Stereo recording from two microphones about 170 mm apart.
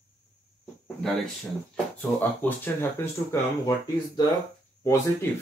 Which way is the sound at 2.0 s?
10° left (ahead or behind).